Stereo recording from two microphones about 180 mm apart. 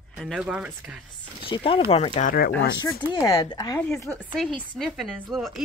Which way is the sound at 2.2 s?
55° left (ahead or behind).